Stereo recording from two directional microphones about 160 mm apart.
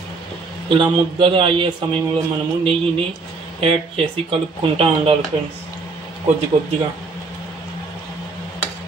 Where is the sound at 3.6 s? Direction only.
35° right (ahead or behind).